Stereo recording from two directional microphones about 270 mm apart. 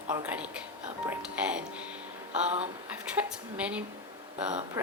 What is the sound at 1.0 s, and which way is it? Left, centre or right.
Whispering, centre.